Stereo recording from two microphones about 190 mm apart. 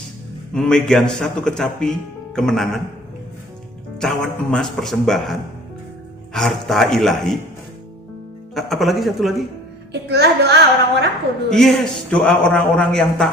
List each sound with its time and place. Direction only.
0.5 s speech: 5° left (ahead or behind)
3.9 s speech: 5° left (ahead or behind)
8.5 s speech: centre (ahead or behind)
9.9 s speech: 60° right (ahead or behind)
11.4 s speech: centre (ahead or behind)